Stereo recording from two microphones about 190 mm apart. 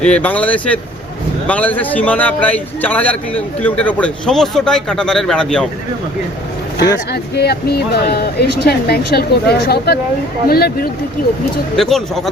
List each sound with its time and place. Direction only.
0.0 s a man's voice: 5° left (ahead or behind)
7.1 s speech: 60° left (ahead or behind)
11.8 s speech: centre (ahead or behind)